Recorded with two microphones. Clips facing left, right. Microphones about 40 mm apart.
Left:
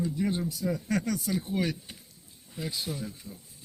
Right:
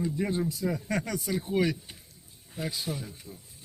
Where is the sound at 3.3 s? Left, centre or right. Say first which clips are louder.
Left 1 dB; right.